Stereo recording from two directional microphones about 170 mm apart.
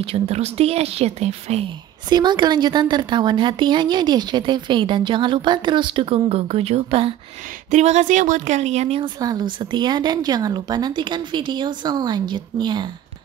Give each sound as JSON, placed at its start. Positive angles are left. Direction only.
{"t": 0.0, "sound": "a woman's voice", "side_deg": -35}
{"t": 2.0, "sound": "a woman's voice", "side_deg": -25}
{"t": 9.2, "sound": "a woman's voice", "side_deg": -25}